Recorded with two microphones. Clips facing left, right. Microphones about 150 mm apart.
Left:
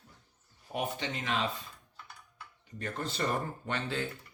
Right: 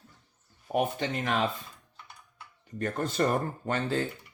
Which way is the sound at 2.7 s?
50° right (ahead or behind).